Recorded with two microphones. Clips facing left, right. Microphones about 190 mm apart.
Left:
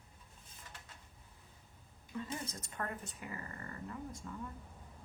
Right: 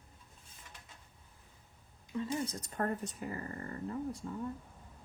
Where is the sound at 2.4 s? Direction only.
35° right (ahead or behind).